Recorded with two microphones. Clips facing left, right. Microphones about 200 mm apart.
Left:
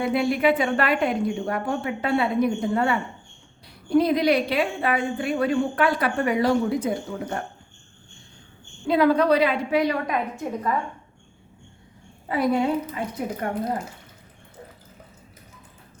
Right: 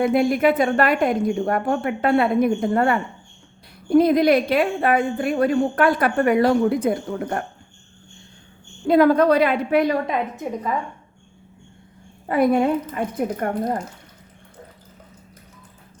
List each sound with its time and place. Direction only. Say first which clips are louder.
0.0 s a woman's voice: right 4 dB; 45° right (ahead or behind)
8.9 s a woman's voice: right 4 dB; 45° right (ahead or behind)
10.1 s a woman's voice: right 2 dB; 20° right (ahead or behind)
12.3 s a woman's voice: right 4 dB; 55° right (ahead or behind)